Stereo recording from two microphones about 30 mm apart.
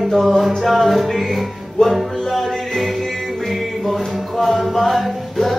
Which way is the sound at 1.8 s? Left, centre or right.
Left.